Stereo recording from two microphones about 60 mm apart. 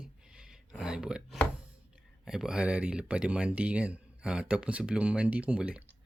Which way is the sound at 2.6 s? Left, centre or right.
Right.